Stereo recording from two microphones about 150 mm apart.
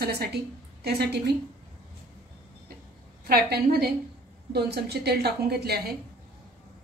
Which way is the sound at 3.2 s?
90° right.